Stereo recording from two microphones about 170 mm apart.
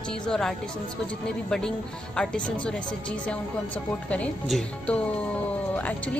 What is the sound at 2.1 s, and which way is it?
Speech, 5° left (ahead or behind).